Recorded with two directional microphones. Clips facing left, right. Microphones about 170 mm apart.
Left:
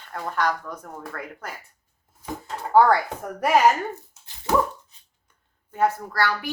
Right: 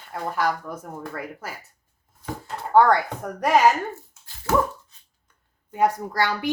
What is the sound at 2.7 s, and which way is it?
Speech, 5° left (ahead or behind).